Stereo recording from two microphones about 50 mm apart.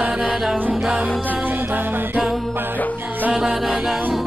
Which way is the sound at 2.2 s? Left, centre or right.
Centre.